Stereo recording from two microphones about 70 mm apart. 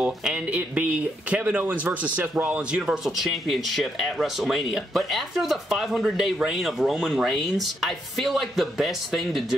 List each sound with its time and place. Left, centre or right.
0.2 s speech: centre
2.9 s speech: centre